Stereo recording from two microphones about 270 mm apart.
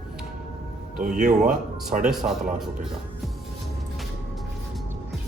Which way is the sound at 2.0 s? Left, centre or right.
Centre.